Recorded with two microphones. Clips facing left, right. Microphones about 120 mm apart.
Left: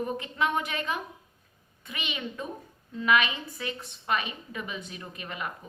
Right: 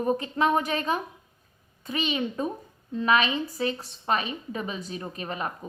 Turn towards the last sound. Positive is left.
turn(degrees=-35)  # may be behind; listen again after turning